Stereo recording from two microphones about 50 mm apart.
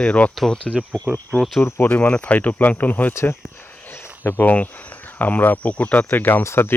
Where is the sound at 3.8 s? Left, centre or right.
Left.